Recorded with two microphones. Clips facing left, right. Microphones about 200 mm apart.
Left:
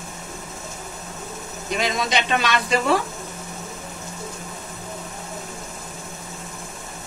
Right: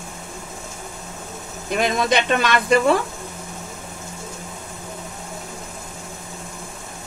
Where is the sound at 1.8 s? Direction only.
55° right (ahead or behind).